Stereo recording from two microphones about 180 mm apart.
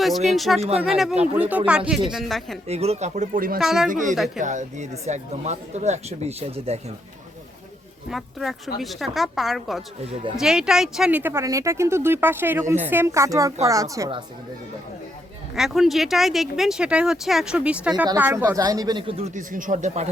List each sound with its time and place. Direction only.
0.3 s speech: centre (ahead or behind)
2.6 s speech: 35° right (ahead or behind); by 3.6 s 50° right (ahead or behind)
3.6 s speech: centre (ahead or behind)
3.8 s a woman's voice: 45° right (ahead or behind)
8.1 s speech: centre (ahead or behind)
10.0 s speech: 35° right (ahead or behind)
10.3 s speech: 5° right (ahead or behind); by 14.3 s 20° right (ahead or behind)
15.5 s speech: centre (ahead or behind); by 20.1 s 45° right (ahead or behind)